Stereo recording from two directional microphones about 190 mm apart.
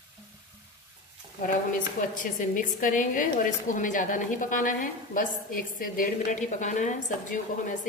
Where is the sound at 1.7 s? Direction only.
45° left (ahead or behind).